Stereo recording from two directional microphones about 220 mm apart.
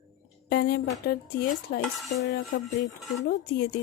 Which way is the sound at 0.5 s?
45° left (ahead or behind).